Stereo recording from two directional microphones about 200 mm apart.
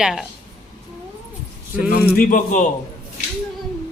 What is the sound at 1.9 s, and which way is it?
Speech, 45° left (ahead or behind).